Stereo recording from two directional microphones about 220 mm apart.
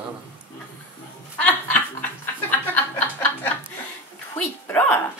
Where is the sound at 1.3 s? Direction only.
5° left (ahead or behind).